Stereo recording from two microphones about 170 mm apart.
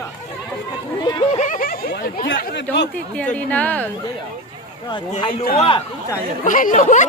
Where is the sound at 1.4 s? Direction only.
50° left (ahead or behind); by 2.8 s 80° left.